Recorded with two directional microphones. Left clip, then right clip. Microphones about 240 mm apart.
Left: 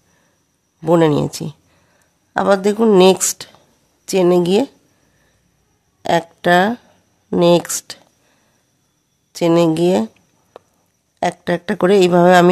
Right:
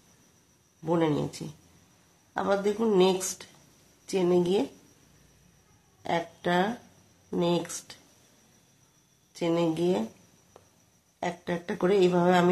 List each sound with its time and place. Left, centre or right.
0.8 s speech: left
6.0 s speech: left
9.3 s speech: left
10.5 s a sound: left
11.1 s speech: left